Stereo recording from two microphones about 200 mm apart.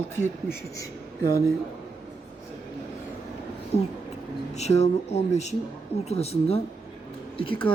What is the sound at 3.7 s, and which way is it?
Speech, 30° left (ahead or behind).